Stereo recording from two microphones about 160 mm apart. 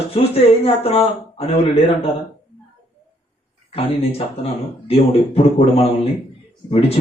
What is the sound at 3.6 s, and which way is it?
Speech, 40° left (ahead or behind).